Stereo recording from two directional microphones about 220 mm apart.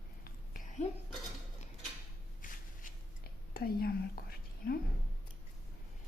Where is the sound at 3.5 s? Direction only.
45° left (ahead or behind).